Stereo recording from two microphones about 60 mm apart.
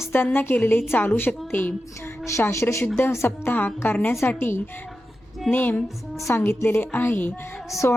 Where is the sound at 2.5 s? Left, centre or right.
Left.